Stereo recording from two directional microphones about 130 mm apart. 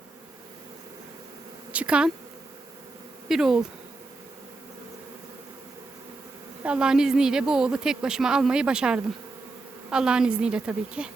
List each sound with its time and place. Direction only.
1.7 s a woman's voice: 10° right (ahead or behind)
3.2 s a woman's voice: 5° right (ahead or behind)
6.6 s a woman's voice: 10° right (ahead or behind)